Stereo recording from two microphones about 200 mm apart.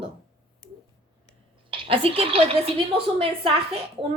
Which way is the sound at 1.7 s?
30° right (ahead or behind).